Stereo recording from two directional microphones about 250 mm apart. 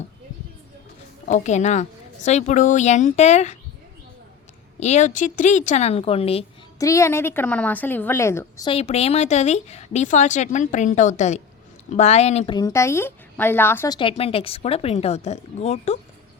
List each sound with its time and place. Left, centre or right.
1.3 s a woman's voice: left
4.8 s a woman's voice: left
6.8 s a woman's voice: centre